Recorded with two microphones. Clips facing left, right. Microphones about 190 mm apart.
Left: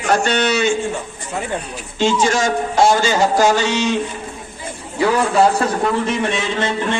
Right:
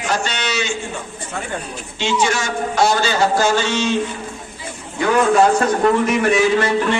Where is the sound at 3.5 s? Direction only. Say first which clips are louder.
Left 2 dB; 40° left (ahead or behind).